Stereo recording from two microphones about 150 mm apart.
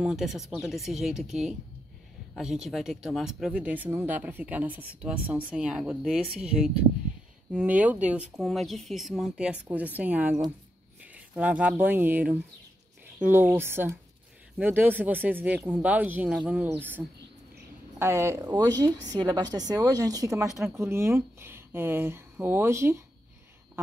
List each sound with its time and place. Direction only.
0.0 s speech: centre (ahead or behind)
17.9 s a woman's voice: 15° right (ahead or behind)
20.4 s speech: centre (ahead or behind)
20.7 s speech: 15° right (ahead or behind)